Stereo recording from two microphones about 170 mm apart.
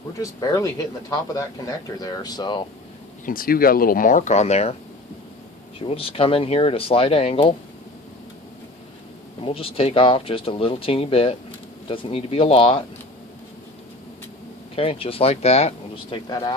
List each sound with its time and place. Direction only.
0.2 s speech: 20° left (ahead or behind)
2.0 s speech: 25° left (ahead or behind)
3.2 s speech: 60° left (ahead or behind); by 4.7 s 40° left (ahead or behind)
5.8 s speech: 35° left (ahead or behind)
9.4 s speech: 35° left (ahead or behind)
14.8 s speech: 35° left (ahead or behind)